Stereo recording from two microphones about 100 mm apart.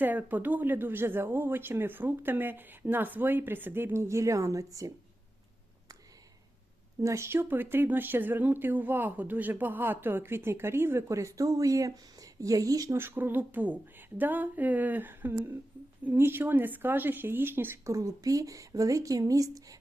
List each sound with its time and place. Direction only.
0.0 s speech: 20° right (ahead or behind); by 4.9 s 35° right (ahead or behind)
7.0 s speech: 30° right (ahead or behind)
13.0 s speech: 20° right (ahead or behind); by 19.8 s 35° right (ahead or behind)